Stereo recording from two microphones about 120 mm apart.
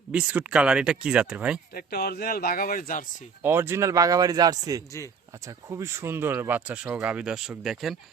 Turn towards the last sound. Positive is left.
turn(degrees=0)  # may be behind; listen again after turning